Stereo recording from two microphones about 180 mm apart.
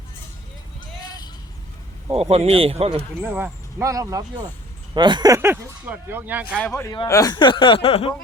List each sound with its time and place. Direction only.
0.8 s a sound: 20° left (ahead or behind)
2.3 s speech: 35° right (ahead or behind)
3.2 s speech: 10° right (ahead or behind)
6.6 s a man's voice: 10° left (ahead or behind)
6.9 s speech: 20° left (ahead or behind)